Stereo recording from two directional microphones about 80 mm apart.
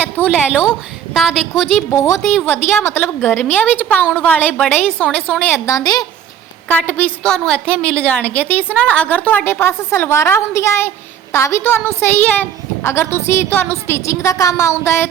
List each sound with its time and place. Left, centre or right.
0.3 s a woman's voice: centre
1.1 s a woman's voice: centre
1.9 s a woman's voice: left
2.5 s a woman's voice: left
5.6 s a woman's voice: left
6.7 s a woman's voice: left
7.3 s a woman's voice: centre
12.8 s a woman's voice: left